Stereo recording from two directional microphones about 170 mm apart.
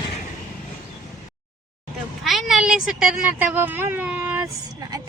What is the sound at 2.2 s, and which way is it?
Speech, centre (ahead or behind).